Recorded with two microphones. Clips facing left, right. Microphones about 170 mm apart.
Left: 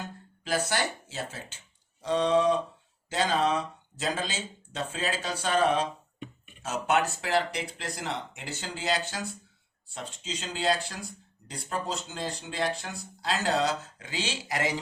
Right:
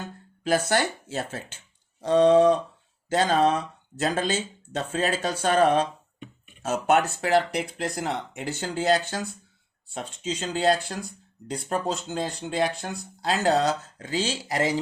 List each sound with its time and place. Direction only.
0.4 s speech: 50° right (ahead or behind); by 14.7 s 30° right (ahead or behind)